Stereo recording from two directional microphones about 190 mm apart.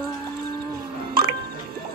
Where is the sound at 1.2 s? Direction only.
50° right (ahead or behind).